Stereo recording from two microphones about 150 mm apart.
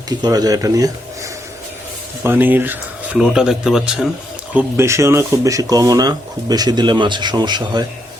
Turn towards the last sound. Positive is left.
turn(degrees=-30)  # may be behind; listen again after turning